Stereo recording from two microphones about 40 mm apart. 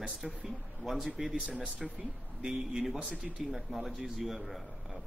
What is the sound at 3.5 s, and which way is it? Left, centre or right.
A man's voice, centre.